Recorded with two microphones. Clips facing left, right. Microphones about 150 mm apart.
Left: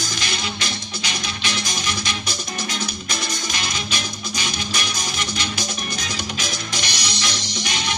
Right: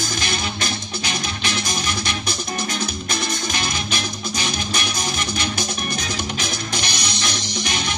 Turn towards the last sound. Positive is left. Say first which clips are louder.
# right 2 dB
turn(degrees=-50)  # may be behind; listen again after turning